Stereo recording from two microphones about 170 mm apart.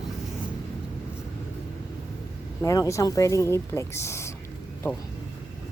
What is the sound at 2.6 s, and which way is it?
Speech, 20° left (ahead or behind).